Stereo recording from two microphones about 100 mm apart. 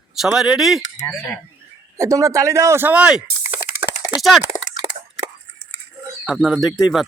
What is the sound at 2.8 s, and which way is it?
Speech, 10° right (ahead or behind).